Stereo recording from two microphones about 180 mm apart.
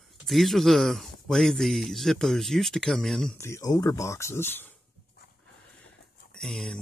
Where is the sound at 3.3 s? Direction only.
15° left (ahead or behind).